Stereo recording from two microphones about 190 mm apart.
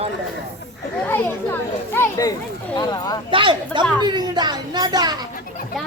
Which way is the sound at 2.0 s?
15° left (ahead or behind).